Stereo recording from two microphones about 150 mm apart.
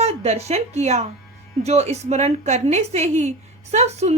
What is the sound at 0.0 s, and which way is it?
A woman's voice, 45° right (ahead or behind).